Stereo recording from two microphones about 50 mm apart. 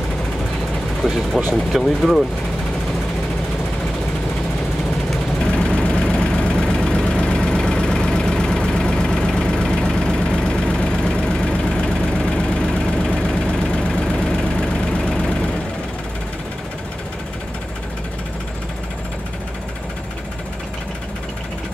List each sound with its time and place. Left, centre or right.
1.0 s speech: centre
5.5 s vehicle: left
15.0 s vehicle: centre